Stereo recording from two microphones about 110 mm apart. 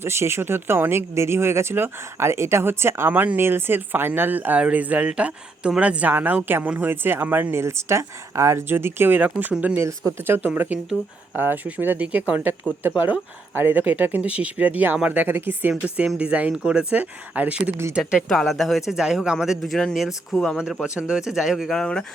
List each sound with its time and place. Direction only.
0.0 s speech: 25° right (ahead or behind)
15.7 s speech: 5° right (ahead or behind)
18.0 s speech: centre (ahead or behind)